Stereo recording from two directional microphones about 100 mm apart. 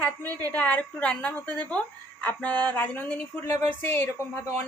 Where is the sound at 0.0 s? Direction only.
20° left (ahead or behind).